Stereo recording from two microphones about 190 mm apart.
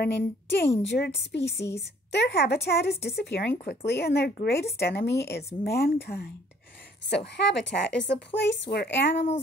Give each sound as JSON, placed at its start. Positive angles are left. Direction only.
{"t": 0.0, "sound": "a woman's voice", "side_deg": 65}